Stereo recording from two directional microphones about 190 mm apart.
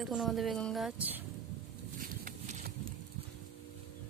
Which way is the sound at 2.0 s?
45° right (ahead or behind).